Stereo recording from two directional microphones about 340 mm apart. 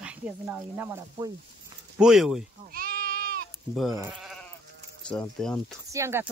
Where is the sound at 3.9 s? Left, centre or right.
Centre.